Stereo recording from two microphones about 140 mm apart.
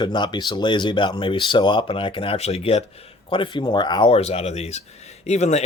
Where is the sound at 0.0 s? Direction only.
35° left (ahead or behind); by 2.8 s 50° left (ahead or behind).